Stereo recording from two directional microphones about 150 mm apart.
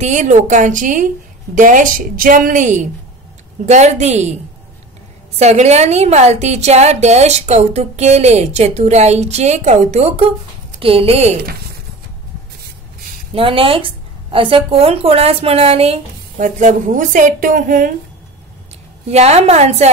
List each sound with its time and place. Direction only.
0.0 s a woman's voice: 55° right (ahead or behind)
5.4 s a woman's voice: 45° right (ahead or behind)
13.3 s a woman's voice: 35° right (ahead or behind)
16.3 s a woman's voice: 55° right (ahead or behind)
19.0 s a woman's voice: 45° right (ahead or behind)